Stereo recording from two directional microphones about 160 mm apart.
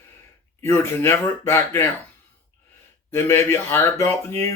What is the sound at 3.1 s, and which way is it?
Speech, 15° left (ahead or behind).